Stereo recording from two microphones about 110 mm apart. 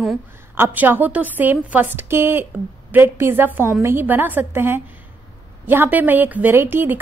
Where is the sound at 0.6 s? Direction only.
20° right (ahead or behind).